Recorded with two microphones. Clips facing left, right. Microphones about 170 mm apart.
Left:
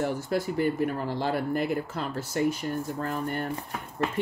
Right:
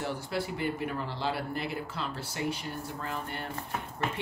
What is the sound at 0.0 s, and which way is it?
Speech, 45° left (ahead or behind).